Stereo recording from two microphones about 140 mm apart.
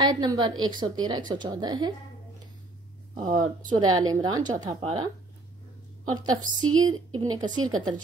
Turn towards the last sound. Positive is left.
turn(degrees=-30)  # may be behind; listen again after turning